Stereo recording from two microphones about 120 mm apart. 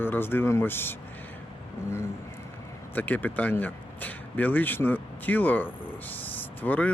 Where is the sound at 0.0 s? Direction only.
20° left (ahead or behind).